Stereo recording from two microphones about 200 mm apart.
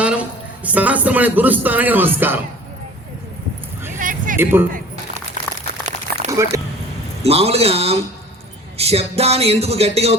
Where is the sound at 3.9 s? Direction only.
40° right (ahead or behind).